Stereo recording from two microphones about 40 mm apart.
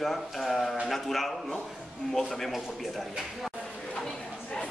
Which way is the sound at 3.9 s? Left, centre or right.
Centre.